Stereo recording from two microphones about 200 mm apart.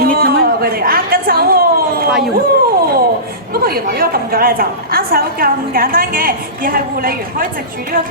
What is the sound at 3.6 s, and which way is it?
A woman's voice, 50° right (ahead or behind).